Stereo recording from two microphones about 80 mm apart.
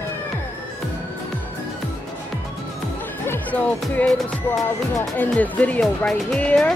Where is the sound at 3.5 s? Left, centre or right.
Centre.